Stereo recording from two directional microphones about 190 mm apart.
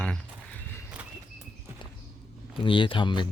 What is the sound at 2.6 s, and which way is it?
Speech, 25° left (ahead or behind).